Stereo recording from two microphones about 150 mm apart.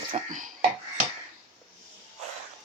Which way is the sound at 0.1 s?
60° right (ahead or behind).